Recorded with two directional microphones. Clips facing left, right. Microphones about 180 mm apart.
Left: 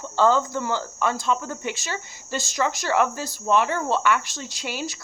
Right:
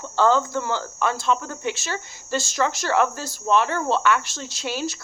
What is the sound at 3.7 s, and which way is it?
Speech, 15° left (ahead or behind).